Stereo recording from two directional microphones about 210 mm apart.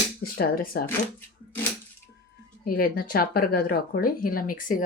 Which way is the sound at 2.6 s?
45° left (ahead or behind).